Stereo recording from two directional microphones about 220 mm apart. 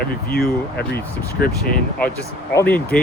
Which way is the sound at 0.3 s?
45° left (ahead or behind).